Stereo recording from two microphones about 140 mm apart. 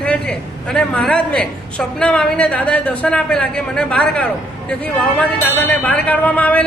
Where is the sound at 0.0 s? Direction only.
5° left (ahead or behind).